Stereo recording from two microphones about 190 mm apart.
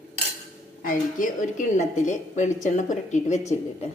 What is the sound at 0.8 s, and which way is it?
A woman's voice, 45° left (ahead or behind).